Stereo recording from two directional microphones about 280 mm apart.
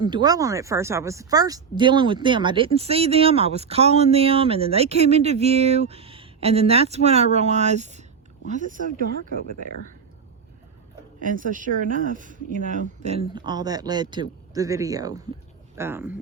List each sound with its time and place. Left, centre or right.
0.0 s speech: centre
11.2 s speech: right; by 16.1 s centre